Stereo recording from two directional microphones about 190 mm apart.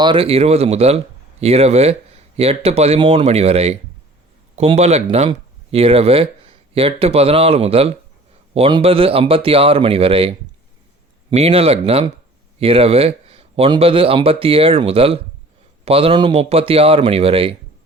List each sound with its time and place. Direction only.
0.0 s speech: 25° right (ahead or behind)